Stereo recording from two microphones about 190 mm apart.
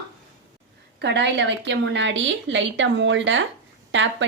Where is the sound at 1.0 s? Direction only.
65° right (ahead or behind).